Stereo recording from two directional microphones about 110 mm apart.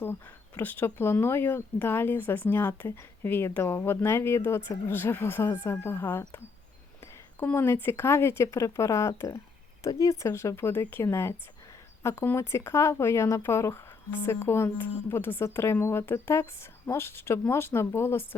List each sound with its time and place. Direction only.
0.0 s speech: 20° left (ahead or behind)